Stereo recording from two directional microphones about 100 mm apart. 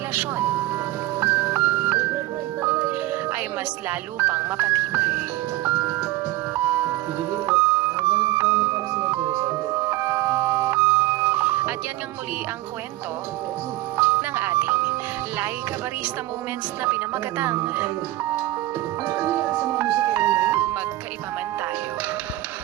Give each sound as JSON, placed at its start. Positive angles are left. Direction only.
{"t": 0.1, "sound": "vehicle", "side_deg": -15}
{"t": 1.2, "sound": "music", "side_deg": -20}
{"t": 4.2, "sound": "speech", "side_deg": -20}
{"t": 5.6, "sound": "music", "side_deg": -20}
{"t": 8.9, "sound": "music", "side_deg": -35}
{"t": 13.9, "sound": "music", "side_deg": -20}
{"t": 16.8, "sound": "speech", "side_deg": -20}
{"t": 19.0, "sound": "music", "side_deg": -25}